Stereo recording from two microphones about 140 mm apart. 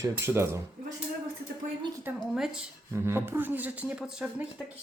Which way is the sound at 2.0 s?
5° right (ahead or behind).